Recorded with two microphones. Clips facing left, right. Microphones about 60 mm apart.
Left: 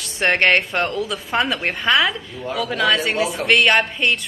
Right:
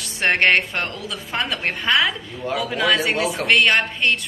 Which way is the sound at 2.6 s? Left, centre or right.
Centre.